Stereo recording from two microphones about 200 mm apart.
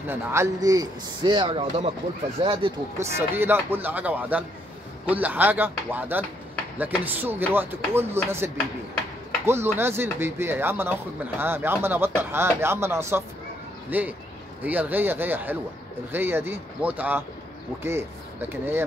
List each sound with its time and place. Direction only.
0.0 s speech: 10° right (ahead or behind)
3.0 s speech: 10° right (ahead or behind)
9.5 s speech: 10° right (ahead or behind)